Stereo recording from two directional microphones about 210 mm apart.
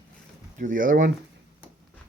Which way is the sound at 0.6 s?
40° right (ahead or behind).